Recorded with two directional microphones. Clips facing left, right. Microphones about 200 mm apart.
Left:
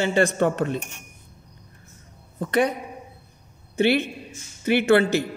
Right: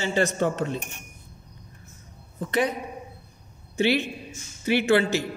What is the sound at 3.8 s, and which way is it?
Speech, 55° left (ahead or behind).